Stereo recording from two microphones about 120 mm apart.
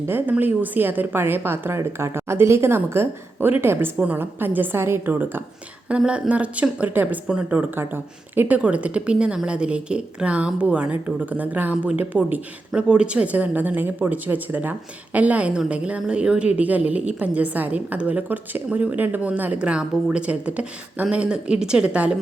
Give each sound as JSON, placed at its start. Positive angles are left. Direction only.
{"t": 0.1, "sound": "speech", "side_deg": -15}